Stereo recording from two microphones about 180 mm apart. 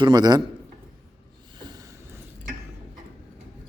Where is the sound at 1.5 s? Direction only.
25° right (ahead or behind).